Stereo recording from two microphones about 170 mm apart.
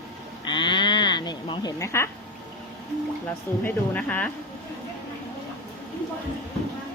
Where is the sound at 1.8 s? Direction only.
15° left (ahead or behind).